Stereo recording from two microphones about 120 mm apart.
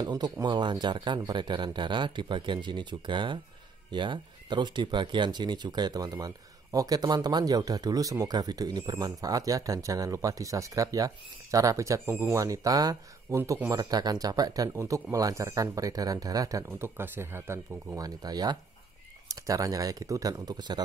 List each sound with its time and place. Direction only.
0.0 s speech: 35° right (ahead or behind)